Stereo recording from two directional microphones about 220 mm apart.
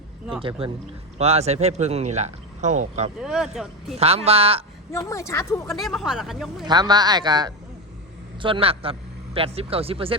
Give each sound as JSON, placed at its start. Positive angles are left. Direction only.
{"t": 0.3, "sound": "speech", "side_deg": -25}
{"t": 3.2, "sound": "speech", "side_deg": -5}
{"t": 3.9, "sound": "speech", "side_deg": -30}
{"t": 4.9, "sound": "speech", "side_deg": 15}
{"t": 5.6, "sound": "speech", "side_deg": 0}
{"t": 6.7, "sound": "speech", "side_deg": -20}